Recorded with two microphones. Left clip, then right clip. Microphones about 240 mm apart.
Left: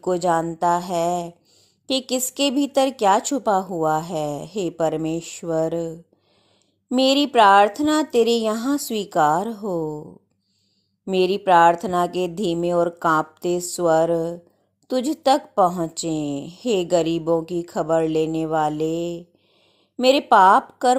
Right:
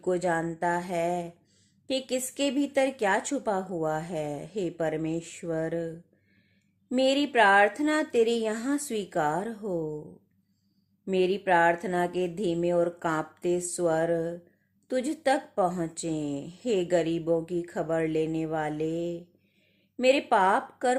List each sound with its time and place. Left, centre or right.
0.0 s speech: left
6.9 s speech: left
11.0 s speech: left
20.0 s speech: left